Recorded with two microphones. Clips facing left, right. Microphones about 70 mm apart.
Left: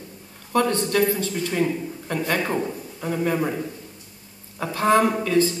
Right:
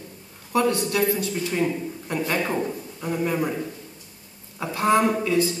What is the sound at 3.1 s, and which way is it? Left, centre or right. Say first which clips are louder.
Speech: left 1 dB; centre.